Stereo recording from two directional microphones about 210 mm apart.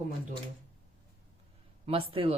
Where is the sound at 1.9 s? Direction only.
25° right (ahead or behind).